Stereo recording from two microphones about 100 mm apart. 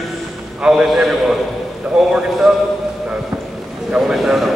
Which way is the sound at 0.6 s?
5° right (ahead or behind).